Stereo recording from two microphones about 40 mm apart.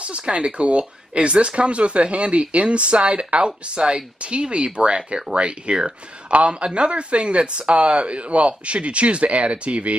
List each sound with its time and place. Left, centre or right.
0.2 s speech: right